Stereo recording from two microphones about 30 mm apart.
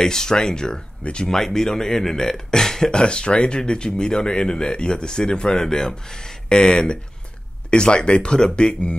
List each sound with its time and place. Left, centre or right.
0.0 s speech: centre
2.9 s speech: left